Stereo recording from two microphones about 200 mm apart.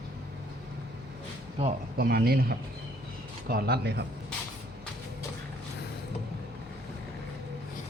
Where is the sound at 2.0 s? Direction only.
50° right (ahead or behind).